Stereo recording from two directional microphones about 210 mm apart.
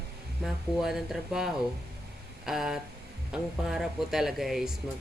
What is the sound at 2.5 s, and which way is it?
Speech, centre (ahead or behind).